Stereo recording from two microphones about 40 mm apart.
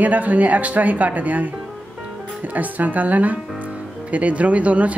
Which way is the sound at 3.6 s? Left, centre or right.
Right.